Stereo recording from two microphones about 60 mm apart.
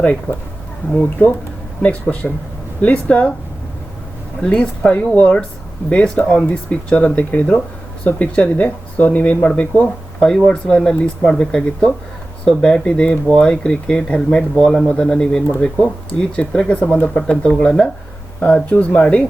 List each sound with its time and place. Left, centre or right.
0.0 s speech: left
1.8 s speech: left
4.4 s speech: left
10.2 s speech: centre